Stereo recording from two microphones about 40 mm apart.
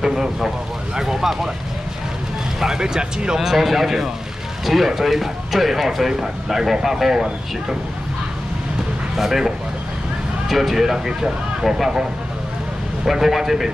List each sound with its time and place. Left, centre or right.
0.0 s speech: centre
2.6 s speech: centre
3.3 s speech: centre
9.1 s speech: centre
10.5 s speech: centre